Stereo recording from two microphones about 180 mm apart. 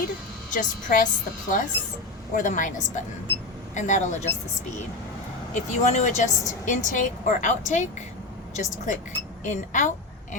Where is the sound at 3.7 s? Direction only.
45° left (ahead or behind).